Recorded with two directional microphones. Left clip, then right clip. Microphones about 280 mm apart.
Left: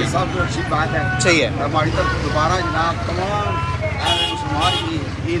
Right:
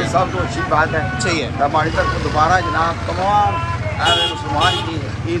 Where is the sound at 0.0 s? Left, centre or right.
Centre.